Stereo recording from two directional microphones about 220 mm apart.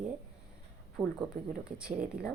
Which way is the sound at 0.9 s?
Centre (ahead or behind).